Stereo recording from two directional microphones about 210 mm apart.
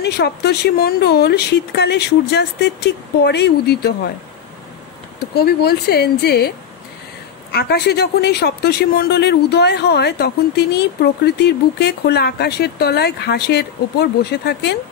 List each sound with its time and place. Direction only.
0.0 s speech: 50° left (ahead or behind)
5.3 s speech: 50° left (ahead or behind)
7.5 s speech: 50° left (ahead or behind)